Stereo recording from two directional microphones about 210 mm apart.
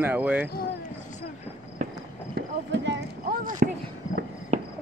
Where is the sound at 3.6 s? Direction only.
45° right (ahead or behind).